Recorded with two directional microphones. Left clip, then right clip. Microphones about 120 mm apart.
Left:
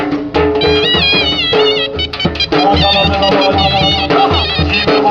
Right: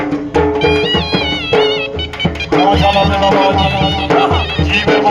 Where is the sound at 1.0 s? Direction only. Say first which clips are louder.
Left 5 dB; 35° right (ahead or behind).